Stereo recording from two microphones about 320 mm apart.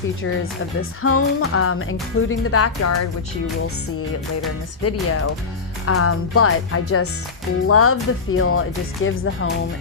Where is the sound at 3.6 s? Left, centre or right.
Left.